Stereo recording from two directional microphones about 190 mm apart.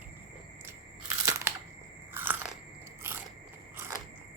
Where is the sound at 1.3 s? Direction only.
15° right (ahead or behind).